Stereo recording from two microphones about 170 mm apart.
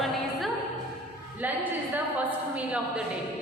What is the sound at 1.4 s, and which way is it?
A woman's voice, 10° right (ahead or behind).